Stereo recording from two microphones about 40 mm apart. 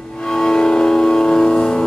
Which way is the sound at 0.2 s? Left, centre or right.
Centre.